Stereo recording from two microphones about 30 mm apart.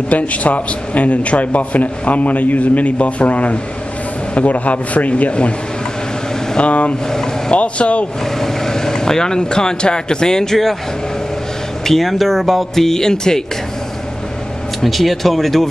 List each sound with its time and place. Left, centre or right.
0.1 s a man's voice: left
6.6 s a man's voice: left
7.1 s speech: centre
7.5 s a man's voice: left
8.4 s speech: centre
11.8 s speech: centre
14.8 s speech: centre